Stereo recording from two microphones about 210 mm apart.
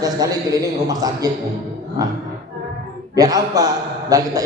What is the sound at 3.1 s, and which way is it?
A man's voice, 15° right (ahead or behind).